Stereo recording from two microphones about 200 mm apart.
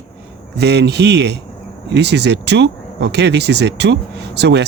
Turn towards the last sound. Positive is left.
turn(degrees=-60)  # may be behind; listen again after turning